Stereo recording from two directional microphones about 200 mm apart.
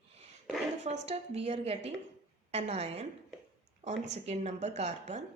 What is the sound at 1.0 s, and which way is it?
A woman's voice, 30° right (ahead or behind).